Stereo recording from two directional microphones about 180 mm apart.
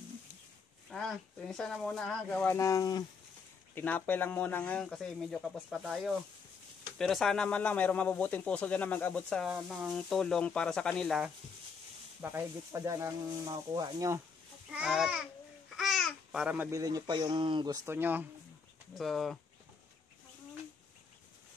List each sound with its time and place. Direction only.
0.8 s speech: 5° left (ahead or behind)
2.3 s speech: 15° left (ahead or behind)
3.7 s speech: 10° left (ahead or behind)
12.2 s speech: 15° right (ahead or behind)
14.7 s speech: 5° right (ahead or behind)
15.7 s babbling: centre (ahead or behind)
16.7 s speech: 20° right (ahead or behind)
18.9 s speech: centre (ahead or behind)